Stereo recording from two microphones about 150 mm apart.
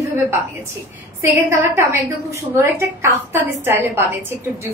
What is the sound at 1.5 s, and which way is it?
A woman's voice, 15° right (ahead or behind).